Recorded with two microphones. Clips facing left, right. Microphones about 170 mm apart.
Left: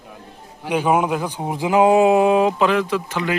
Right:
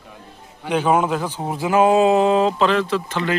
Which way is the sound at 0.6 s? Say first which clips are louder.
Even; 10° left (ahead or behind).